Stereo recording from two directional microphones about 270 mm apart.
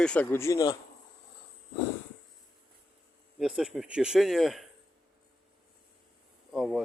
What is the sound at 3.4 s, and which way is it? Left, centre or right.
Speech, centre.